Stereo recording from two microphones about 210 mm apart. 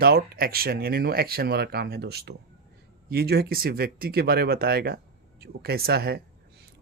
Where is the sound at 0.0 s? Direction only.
45° right (ahead or behind).